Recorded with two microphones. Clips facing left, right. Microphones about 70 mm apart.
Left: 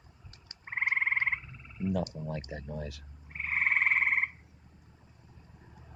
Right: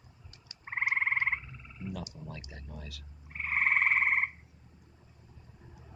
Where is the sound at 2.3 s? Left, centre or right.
Left.